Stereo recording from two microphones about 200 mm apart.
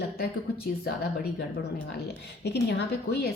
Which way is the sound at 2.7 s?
55° left (ahead or behind).